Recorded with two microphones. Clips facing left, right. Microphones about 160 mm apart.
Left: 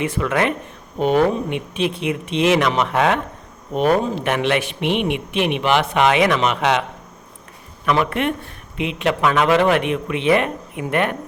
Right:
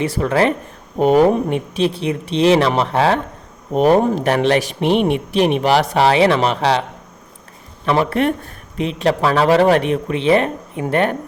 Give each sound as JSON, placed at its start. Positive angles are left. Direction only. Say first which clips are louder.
{"t": 0.0, "sound": "a man's voice", "louder": "right 4 dB", "side_deg": -35}
{"t": 7.9, "sound": "a man's voice", "louder": "right 3 dB", "side_deg": -30}